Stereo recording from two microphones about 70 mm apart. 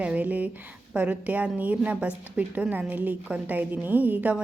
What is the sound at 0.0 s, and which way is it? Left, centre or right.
Speech, right.